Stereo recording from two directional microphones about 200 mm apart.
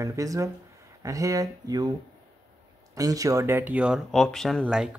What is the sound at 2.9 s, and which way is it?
Speech, 15° right (ahead or behind).